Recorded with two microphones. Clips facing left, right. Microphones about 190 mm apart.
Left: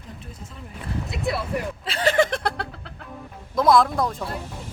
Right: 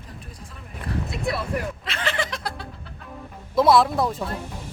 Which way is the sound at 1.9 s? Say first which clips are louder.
Left 13 dB; 40° left (ahead or behind).